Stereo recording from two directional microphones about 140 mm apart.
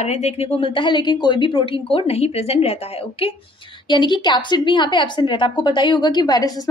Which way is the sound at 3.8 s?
30° left (ahead or behind).